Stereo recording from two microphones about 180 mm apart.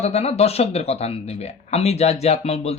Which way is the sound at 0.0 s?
35° left (ahead or behind).